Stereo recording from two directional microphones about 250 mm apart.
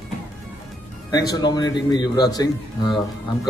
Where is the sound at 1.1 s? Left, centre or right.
Centre.